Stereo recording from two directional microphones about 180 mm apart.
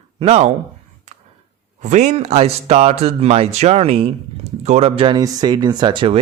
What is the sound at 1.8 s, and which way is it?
Speech, 40° right (ahead or behind).